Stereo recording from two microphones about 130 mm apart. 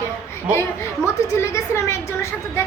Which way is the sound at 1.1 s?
20° left (ahead or behind).